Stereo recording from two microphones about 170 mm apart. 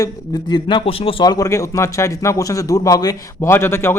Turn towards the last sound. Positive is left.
turn(degrees=15)  # may be behind; listen again after turning